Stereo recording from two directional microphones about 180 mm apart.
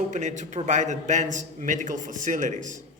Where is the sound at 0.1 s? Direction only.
40° right (ahead or behind).